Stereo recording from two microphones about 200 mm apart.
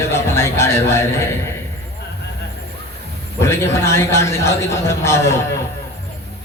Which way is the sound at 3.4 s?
15° left (ahead or behind).